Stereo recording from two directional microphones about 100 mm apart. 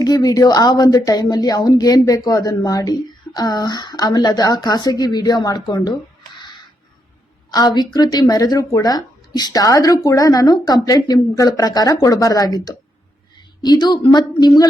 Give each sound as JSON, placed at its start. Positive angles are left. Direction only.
{"t": 0.0, "sound": "a woman's voice", "side_deg": 40}